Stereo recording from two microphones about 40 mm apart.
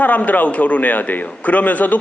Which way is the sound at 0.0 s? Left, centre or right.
Left.